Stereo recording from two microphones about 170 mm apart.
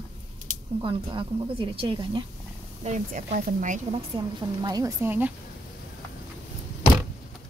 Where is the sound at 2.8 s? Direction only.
45° right (ahead or behind).